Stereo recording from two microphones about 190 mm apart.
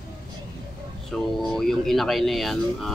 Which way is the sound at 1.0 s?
Centre (ahead or behind).